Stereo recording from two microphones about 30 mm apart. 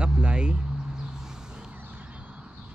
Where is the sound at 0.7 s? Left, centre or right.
Right.